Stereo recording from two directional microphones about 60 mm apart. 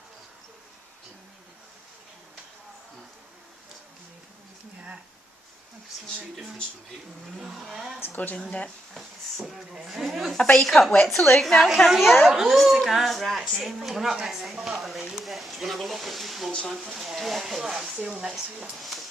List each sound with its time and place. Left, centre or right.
7.4 s speech: centre
8.0 s speech: left
9.0 s a woman's voice: centre
15.1 s a sound: centre
16.9 s a woman's voice: centre